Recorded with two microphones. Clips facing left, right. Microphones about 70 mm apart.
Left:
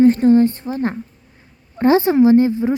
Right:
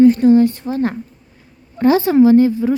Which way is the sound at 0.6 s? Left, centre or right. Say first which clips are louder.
Right 2 dB; left.